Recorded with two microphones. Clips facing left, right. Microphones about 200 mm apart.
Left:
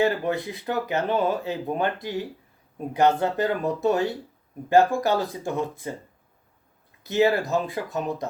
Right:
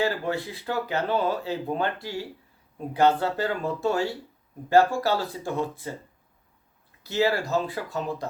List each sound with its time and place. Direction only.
0.0 s speech: 20° left (ahead or behind)
7.0 s speech: 20° left (ahead or behind)